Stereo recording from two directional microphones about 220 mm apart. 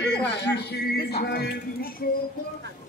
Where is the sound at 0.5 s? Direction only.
45° left (ahead or behind).